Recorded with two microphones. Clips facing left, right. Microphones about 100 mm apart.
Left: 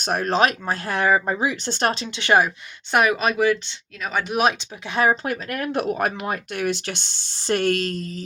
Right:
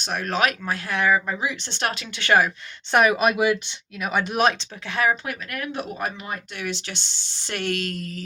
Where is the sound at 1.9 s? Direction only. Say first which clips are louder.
Even; 25° left (ahead or behind).